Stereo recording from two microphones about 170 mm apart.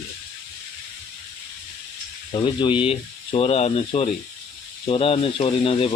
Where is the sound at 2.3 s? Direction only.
25° left (ahead or behind).